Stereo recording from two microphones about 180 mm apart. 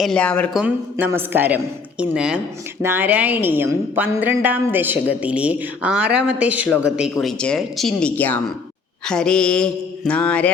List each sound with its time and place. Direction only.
0.0 s a woman's voice: 5° left (ahead or behind)
0.5 s a woman's voice: 10° right (ahead or behind); by 8.4 s 10° left (ahead or behind)
9.0 s mantra: 5° left (ahead or behind)